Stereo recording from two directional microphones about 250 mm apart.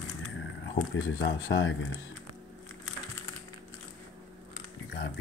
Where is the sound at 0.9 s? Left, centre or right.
Left.